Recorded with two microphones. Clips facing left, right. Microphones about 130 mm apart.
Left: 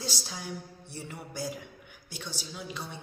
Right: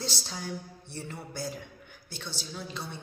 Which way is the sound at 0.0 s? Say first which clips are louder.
Right 1 dB; 10° left (ahead or behind).